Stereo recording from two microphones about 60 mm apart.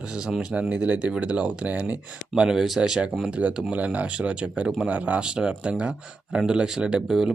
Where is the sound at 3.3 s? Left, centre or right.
Right.